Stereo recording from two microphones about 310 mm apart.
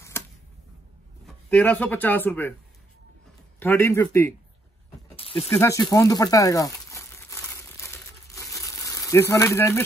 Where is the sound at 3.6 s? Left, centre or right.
Centre.